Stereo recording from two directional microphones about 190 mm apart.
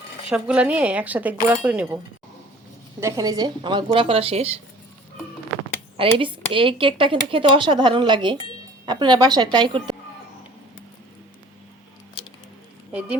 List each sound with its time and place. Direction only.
0.3 s speech: 5° right (ahead or behind)
3.0 s speech: 15° right (ahead or behind)
6.1 s speech: 25° right (ahead or behind)
12.9 s a sound: 10° right (ahead or behind)